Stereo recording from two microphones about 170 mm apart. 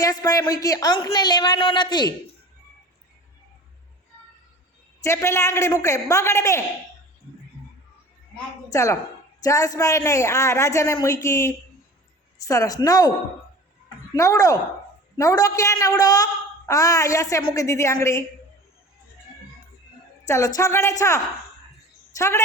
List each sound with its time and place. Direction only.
0.0 s a woman's voice: 20° left (ahead or behind)
4.9 s speech: 15° left (ahead or behind)
8.7 s a woman's voice: 20° left (ahead or behind)
14.2 s a woman's voice: 20° left (ahead or behind)
20.2 s speech: 20° left (ahead or behind)